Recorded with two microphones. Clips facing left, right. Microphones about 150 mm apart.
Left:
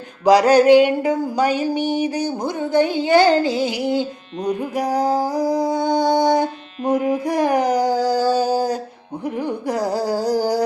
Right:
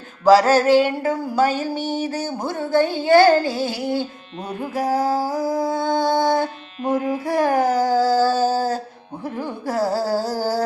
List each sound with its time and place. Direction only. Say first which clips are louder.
0.3 s music: left 2 dB; 15° left (ahead or behind)
4.4 s a sound: left 2 dB; 15° left (ahead or behind)
9.2 s music: left 4 dB; 15° left (ahead or behind)